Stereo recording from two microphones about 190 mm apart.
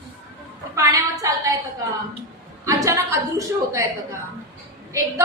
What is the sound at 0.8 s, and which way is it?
Speech, 15° right (ahead or behind).